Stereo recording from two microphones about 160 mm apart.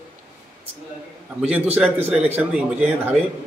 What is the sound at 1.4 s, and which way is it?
A man's voice, 10° right (ahead or behind).